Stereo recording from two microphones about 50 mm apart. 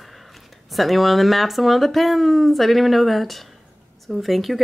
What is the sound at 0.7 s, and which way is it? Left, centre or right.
Speech, centre.